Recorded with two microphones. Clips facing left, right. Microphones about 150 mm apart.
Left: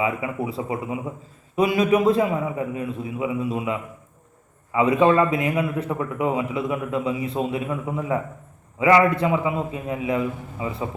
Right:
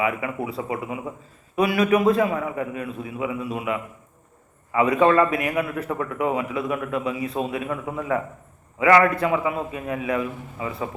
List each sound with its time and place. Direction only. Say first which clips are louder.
0.0 s a man's voice: even; 25° left (ahead or behind)